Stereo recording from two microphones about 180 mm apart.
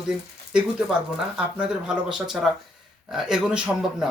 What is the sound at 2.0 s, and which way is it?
Speech, 5° right (ahead or behind).